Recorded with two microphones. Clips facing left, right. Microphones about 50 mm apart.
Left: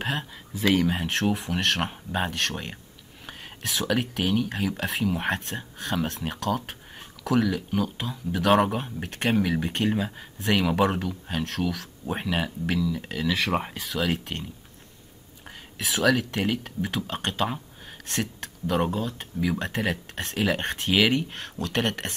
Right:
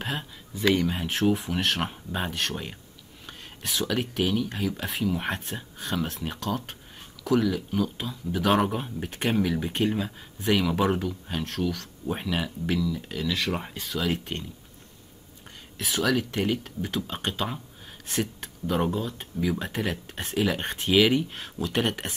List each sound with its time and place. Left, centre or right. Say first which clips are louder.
0.0 s speech: left 3 dB; centre
13.5 s speech: left 4 dB; left
13.7 s speech: left 2 dB; centre
15.4 s speech: left 2 dB; centre